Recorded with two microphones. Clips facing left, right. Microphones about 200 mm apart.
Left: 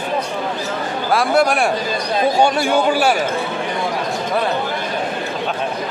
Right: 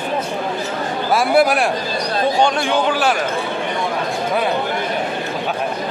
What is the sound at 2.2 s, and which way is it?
Speech, 10° left (ahead or behind).